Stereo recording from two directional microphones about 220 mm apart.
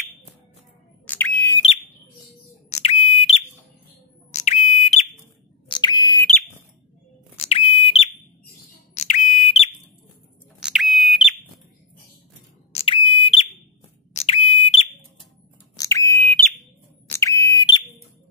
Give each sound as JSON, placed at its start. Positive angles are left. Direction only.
{"t": 1.0, "sound": "bird", "side_deg": 10}
{"t": 2.7, "sound": "smoke detector", "side_deg": 30}
{"t": 4.3, "sound": "fire alarm", "side_deg": 30}
{"t": 5.7, "sound": "a sound", "side_deg": 20}
{"t": 7.3, "sound": "smoke detector", "side_deg": 25}
{"t": 10.6, "sound": "a sound", "side_deg": 0}
{"t": 12.7, "sound": "smoke detector", "side_deg": 25}
{"t": 15.7, "sound": "bird", "side_deg": 15}
{"t": 17.1, "sound": "smoke detector", "side_deg": 15}